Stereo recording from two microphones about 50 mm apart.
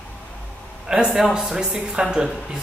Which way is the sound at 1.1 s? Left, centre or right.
Centre.